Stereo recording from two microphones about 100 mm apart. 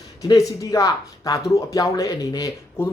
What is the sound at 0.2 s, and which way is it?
Speech, 35° left (ahead or behind).